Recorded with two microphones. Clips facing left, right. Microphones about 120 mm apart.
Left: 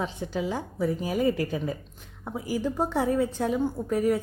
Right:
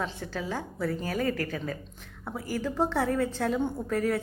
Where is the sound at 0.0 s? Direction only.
15° left (ahead or behind).